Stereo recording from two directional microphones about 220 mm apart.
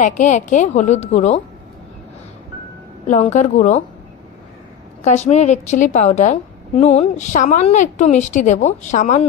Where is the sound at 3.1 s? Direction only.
35° left (ahead or behind).